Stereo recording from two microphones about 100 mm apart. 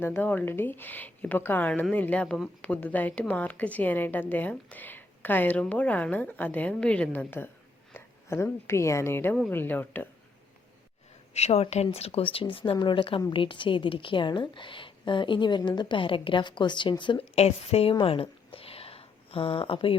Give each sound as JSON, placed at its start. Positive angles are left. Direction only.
{"t": 0.0, "sound": "a woman's voice", "side_deg": 20}
{"t": 11.3, "sound": "a woman's voice", "side_deg": 90}
{"t": 17.2, "sound": "a woman's voice", "side_deg": 85}
{"t": 18.0, "sound": "a sound", "side_deg": 70}